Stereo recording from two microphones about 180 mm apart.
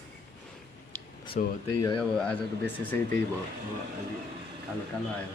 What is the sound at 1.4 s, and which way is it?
Speech, 45° left (ahead or behind).